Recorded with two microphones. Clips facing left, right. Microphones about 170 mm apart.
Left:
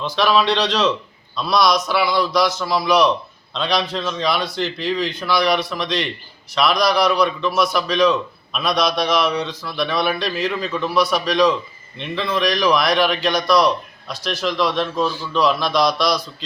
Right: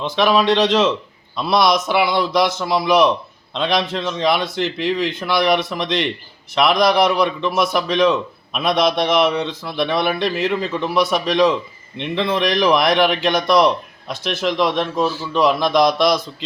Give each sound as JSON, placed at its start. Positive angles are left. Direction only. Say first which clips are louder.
{"t": 0.0, "sound": "a man's voice", "louder": "right 2 dB", "side_deg": -15}
{"t": 15.0, "sound": "a man's voice", "louder": "right 2 dB", "side_deg": -5}
{"t": 15.3, "sound": "a man's voice", "louder": "right 3 dB", "side_deg": -20}